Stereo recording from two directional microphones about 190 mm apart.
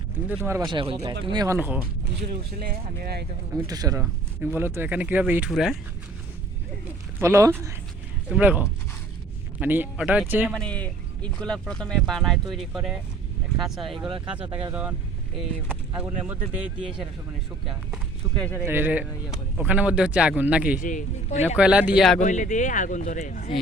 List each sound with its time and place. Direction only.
0.3 s speech: 15° right (ahead or behind)
1.5 s speech: 10° right (ahead or behind)
2.6 s speech: 55° right (ahead or behind)
3.7 s speech: 20° right (ahead or behind); by 5.7 s centre (ahead or behind)
7.2 s speech: 15° right (ahead or behind)
10.5 s speech: 5° left (ahead or behind)
16.0 s speech: 10° right (ahead or behind)
17.9 s speech: 5° left (ahead or behind)
18.6 s speech: 10° right (ahead or behind)
20.7 s speech: 45° left (ahead or behind)
21.5 s speech: 5° right (ahead or behind)
22.2 s a man's voice: 40° left (ahead or behind)